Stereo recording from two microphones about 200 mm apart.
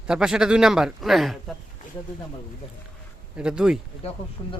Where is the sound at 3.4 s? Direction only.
5° right (ahead or behind).